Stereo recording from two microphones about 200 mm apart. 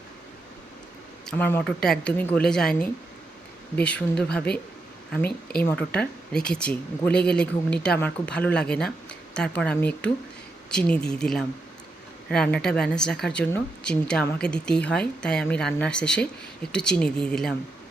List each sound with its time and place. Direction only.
1.2 s speech: 5° left (ahead or behind)
5.2 s speech: 50° left (ahead or behind)
5.6 s speech: 5° left (ahead or behind)